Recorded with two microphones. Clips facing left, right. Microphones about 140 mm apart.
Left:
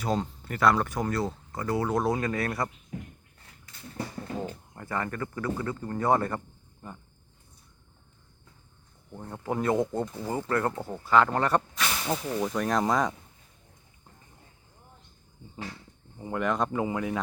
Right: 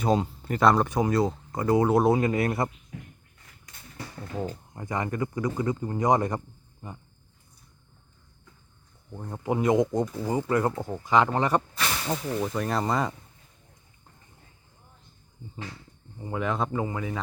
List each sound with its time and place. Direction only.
0.0 s speech: 20° right (ahead or behind)
4.7 s speech: 15° right (ahead or behind)
9.1 s speech: 10° right (ahead or behind)
16.1 s speech: centre (ahead or behind)